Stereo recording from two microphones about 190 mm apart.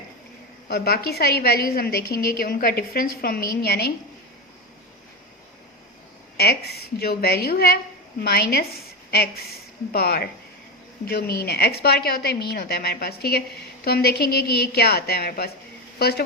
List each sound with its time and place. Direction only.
0.7 s a woman's voice: 55° left (ahead or behind)
6.3 s a woman's voice: 55° left (ahead or behind)